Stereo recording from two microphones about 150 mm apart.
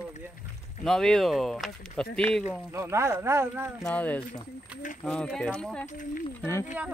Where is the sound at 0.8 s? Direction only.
5° left (ahead or behind).